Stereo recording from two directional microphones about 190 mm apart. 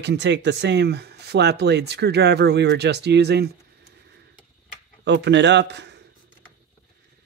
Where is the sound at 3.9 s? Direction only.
60° right (ahead or behind).